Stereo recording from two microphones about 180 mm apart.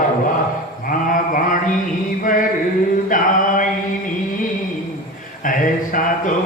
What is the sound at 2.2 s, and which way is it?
Mantra, 50° left (ahead or behind).